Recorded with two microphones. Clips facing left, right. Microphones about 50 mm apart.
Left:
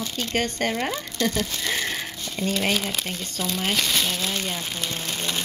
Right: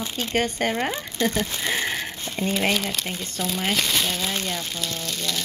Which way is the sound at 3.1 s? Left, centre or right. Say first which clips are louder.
Right 1 dB; centre.